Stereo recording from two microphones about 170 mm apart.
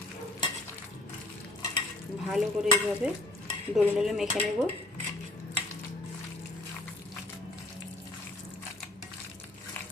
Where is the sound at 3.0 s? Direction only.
5° right (ahead or behind).